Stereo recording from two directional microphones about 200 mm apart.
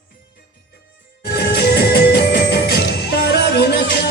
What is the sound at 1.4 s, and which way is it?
Music, 55° left (ahead or behind).